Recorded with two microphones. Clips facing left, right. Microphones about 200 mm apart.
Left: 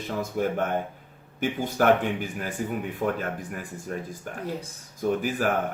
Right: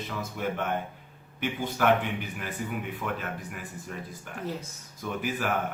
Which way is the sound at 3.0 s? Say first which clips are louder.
Left 6 dB; 45° left (ahead or behind).